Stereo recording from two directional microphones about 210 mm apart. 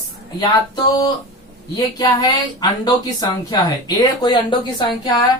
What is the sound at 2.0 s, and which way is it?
Speech, 20° left (ahead or behind).